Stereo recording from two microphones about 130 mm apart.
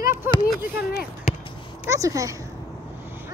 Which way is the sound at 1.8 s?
25° right (ahead or behind).